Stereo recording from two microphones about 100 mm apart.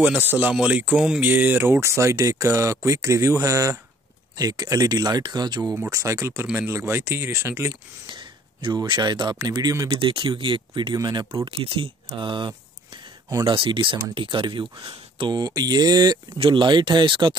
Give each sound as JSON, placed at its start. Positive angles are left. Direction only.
{"t": 0.0, "sound": "speech", "side_deg": -20}
{"t": 5.9, "sound": "speech", "side_deg": -30}
{"t": 8.1, "sound": "speech", "side_deg": -55}
{"t": 9.9, "sound": "speech", "side_deg": -60}
{"t": 11.0, "sound": "speech", "side_deg": -40}
{"t": 11.5, "sound": "speech", "side_deg": -65}
{"t": 12.2, "sound": "a sound", "side_deg": -55}
{"t": 13.5, "sound": "speech", "side_deg": -55}
{"t": 15.3, "sound": "speech", "side_deg": -40}
{"t": 16.3, "sound": "speech", "side_deg": -55}